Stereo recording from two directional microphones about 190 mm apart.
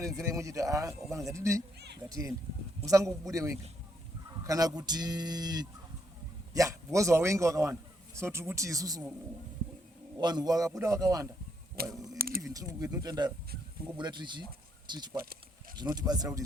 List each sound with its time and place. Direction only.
0.0 s a man's voice: 15° right (ahead or behind)
10.2 s a man's voice: 20° right (ahead or behind)
11.8 s speech: 55° right (ahead or behind)
12.1 s a sound: 50° right (ahead or behind)
12.4 s speech: 15° right (ahead or behind)